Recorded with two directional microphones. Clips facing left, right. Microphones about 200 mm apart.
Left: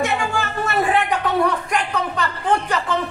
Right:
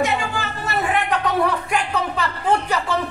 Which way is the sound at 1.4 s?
5° right (ahead or behind).